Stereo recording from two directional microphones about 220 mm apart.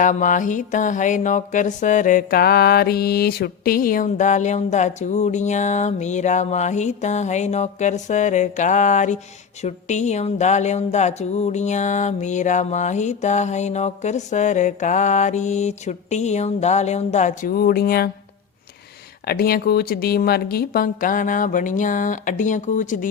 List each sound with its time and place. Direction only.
0.0 s music: 35° left (ahead or behind)
19.3 s music: 45° left (ahead or behind)